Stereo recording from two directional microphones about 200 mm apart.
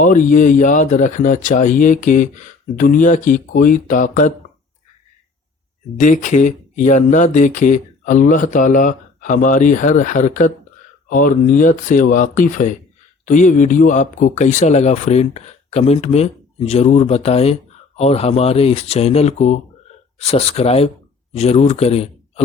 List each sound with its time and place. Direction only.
0.0 s speech: 40° left (ahead or behind)
6.0 s speech: 40° left (ahead or behind)